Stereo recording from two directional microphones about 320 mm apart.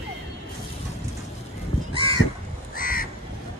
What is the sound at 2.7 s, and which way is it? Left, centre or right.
Crow, left.